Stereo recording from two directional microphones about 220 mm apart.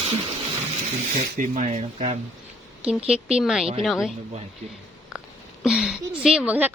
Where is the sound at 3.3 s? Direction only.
Centre (ahead or behind).